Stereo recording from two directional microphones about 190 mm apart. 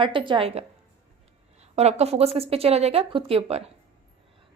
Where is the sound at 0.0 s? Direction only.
25° right (ahead or behind).